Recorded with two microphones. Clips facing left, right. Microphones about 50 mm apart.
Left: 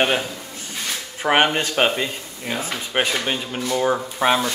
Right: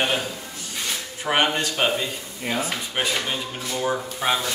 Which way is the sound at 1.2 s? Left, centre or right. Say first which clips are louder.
Left 4 dB; left.